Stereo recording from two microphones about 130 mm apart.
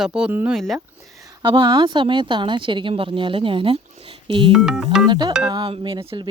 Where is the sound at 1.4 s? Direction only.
40° right (ahead or behind).